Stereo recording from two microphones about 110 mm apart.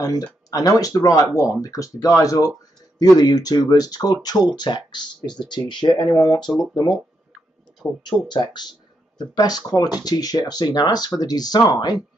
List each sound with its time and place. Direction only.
0.0 s speech: 35° left (ahead or behind)
8.0 s speech: 40° left (ahead or behind)